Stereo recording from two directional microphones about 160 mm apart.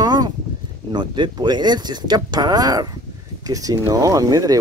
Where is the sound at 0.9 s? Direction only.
30° right (ahead or behind).